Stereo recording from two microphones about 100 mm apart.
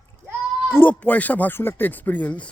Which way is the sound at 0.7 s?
20° left (ahead or behind).